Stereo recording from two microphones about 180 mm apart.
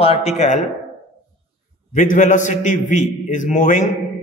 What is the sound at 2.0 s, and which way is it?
A man's voice, 45° left (ahead or behind).